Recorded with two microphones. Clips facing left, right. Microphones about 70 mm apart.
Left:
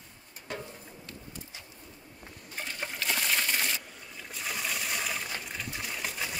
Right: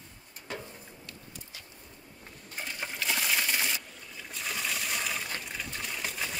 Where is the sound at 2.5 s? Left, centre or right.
Centre.